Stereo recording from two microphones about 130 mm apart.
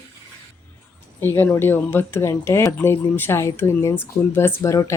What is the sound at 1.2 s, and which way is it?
Speech, 15° left (ahead or behind).